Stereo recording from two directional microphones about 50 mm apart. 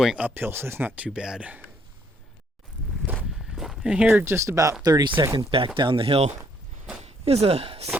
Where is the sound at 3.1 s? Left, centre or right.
Right.